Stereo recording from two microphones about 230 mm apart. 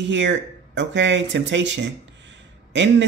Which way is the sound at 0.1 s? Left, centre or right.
Right.